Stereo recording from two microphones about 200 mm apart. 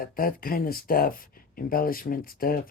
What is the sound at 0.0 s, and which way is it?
Speech, 45° left (ahead or behind).